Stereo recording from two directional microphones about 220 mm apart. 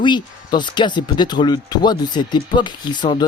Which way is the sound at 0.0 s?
20° left (ahead or behind).